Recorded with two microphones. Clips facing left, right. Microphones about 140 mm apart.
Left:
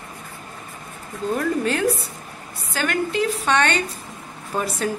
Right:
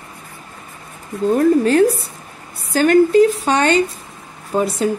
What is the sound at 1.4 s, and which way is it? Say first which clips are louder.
A woman's voice: right 10 dB; 40° right (ahead or behind).